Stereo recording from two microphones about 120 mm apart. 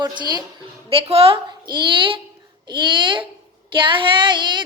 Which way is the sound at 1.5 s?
40° right (ahead or behind).